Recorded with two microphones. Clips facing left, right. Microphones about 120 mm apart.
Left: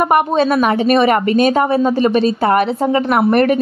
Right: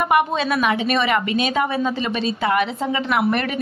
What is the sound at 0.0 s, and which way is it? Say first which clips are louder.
A woman's voice: left 5 dB; 40° left (ahead or behind).